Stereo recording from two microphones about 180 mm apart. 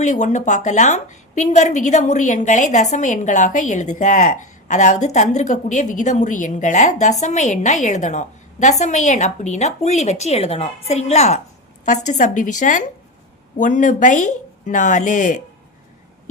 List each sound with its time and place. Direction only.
0.0 s a woman's voice: 40° left (ahead or behind)